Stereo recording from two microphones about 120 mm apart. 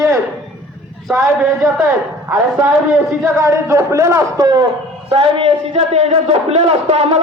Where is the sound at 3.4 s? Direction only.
20° right (ahead or behind).